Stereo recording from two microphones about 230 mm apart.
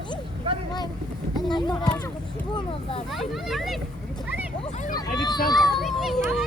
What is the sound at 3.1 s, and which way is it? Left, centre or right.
Speech, centre.